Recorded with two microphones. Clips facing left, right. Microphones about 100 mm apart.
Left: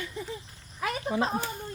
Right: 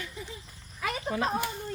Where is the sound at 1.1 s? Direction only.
15° left (ahead or behind).